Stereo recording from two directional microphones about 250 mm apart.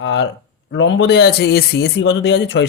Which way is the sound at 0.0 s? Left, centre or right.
Left.